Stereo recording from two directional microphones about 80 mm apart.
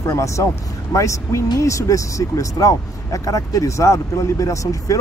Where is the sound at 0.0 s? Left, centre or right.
Left.